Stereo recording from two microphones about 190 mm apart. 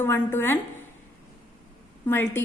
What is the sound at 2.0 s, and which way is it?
Speech, 10° left (ahead or behind).